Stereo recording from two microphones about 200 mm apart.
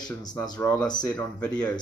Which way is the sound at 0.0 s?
10° left (ahead or behind).